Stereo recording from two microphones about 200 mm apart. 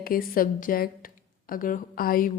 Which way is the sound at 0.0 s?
45° left (ahead or behind).